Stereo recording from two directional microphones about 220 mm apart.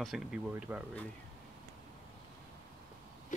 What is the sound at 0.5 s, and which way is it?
Speech, 5° right (ahead or behind).